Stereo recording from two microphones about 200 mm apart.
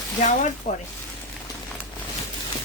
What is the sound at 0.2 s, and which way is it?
Speech, 40° left (ahead or behind).